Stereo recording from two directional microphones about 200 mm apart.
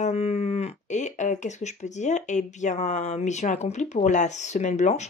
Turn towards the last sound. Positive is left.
turn(degrees=35)  # may be behind; listen again after turning